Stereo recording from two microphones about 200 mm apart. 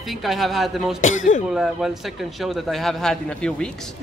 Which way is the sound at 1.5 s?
Centre (ahead or behind).